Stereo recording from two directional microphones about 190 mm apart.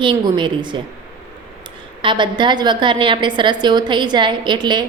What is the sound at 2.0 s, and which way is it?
A woman's voice, 25° right (ahead or behind).